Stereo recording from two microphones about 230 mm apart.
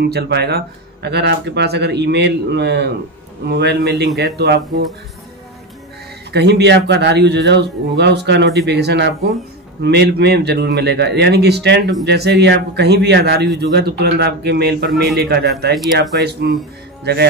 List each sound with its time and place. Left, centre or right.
0.0 s speech: right
6.3 s speech: right